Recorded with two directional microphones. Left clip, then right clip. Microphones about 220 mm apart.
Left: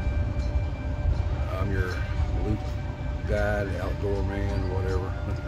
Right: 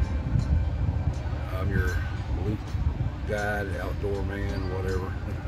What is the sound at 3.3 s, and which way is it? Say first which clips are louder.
Speech: left 2 dB; 5° left (ahead or behind).